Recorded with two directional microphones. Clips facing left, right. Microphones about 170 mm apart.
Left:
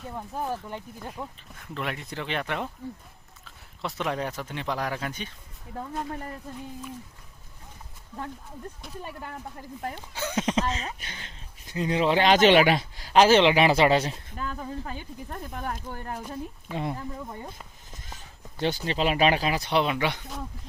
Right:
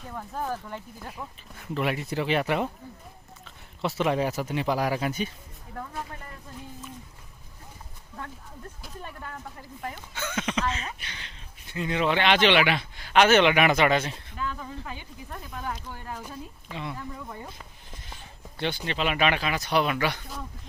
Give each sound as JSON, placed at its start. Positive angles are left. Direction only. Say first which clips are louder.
{"t": 0.1, "sound": "speech", "louder": "even", "side_deg": 15}
{"t": 1.5, "sound": "speech", "louder": "right 5 dB", "side_deg": -5}
{"t": 9.9, "sound": "speech", "louder": "left 4 dB", "side_deg": 35}
{"t": 17.0, "sound": "speech", "louder": "left 2 dB", "side_deg": 25}
{"t": 17.9, "sound": "a sound", "louder": "left 1 dB", "side_deg": 45}
{"t": 18.9, "sound": "speech", "louder": "left 2 dB", "side_deg": 35}